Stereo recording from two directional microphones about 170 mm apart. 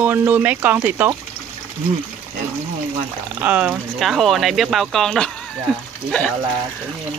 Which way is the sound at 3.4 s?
10° right (ahead or behind).